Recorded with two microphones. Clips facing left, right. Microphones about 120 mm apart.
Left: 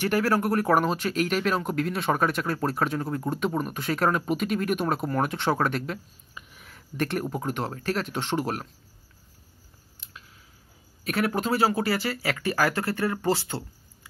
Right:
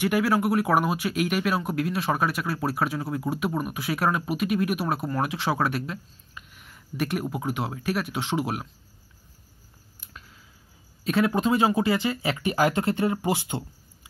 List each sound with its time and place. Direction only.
0.0 s speech: 15° right (ahead or behind)
11.1 s speech: 25° right (ahead or behind)